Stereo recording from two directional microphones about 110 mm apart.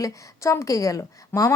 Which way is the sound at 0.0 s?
30° left (ahead or behind).